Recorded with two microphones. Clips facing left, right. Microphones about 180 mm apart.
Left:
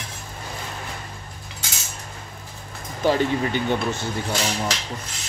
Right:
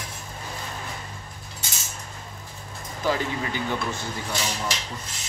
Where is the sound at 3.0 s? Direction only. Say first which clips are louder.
Left 6 dB; 25° left (ahead or behind).